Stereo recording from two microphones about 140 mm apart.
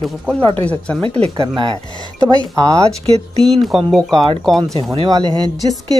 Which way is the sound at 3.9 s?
Centre (ahead or behind).